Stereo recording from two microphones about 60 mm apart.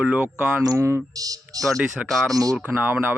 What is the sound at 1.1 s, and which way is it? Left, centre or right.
Speech, right.